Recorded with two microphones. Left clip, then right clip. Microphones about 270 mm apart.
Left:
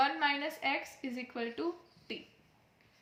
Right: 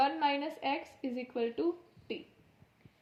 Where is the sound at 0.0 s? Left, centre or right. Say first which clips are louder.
Right 1 dB; left.